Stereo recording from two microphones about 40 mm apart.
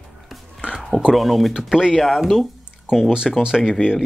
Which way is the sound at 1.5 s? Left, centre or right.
Centre.